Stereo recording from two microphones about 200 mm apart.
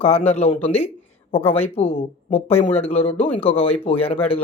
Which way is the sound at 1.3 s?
10° left (ahead or behind).